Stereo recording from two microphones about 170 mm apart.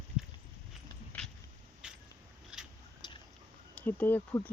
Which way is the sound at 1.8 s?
5° right (ahead or behind).